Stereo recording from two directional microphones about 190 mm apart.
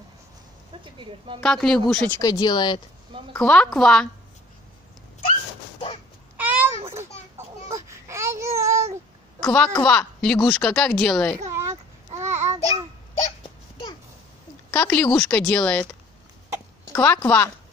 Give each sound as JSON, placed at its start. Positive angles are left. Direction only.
{"t": 0.8, "sound": "speech", "side_deg": -25}
{"t": 1.4, "sound": "a woman's voice", "side_deg": 5}
{"t": 2.1, "sound": "speech", "side_deg": 20}
{"t": 3.3, "sound": "a woman's voice", "side_deg": 5}
{"t": 6.3, "sound": "cat", "side_deg": -10}
{"t": 7.3, "sound": "a sound", "side_deg": -15}
{"t": 9.4, "sound": "a woman's voice", "side_deg": 10}
{"t": 11.3, "sound": "a sound", "side_deg": -15}
{"t": 12.2, "sound": "babbling", "side_deg": -15}
{"t": 13.4, "sound": "babbling", "side_deg": 25}
{"t": 14.7, "sound": "a woman's voice", "side_deg": 10}
{"t": 16.9, "sound": "speech", "side_deg": 10}